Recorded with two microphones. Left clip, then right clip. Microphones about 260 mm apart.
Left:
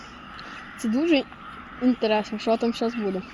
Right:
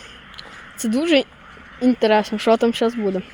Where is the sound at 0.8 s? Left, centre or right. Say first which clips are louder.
Right 5 dB; right.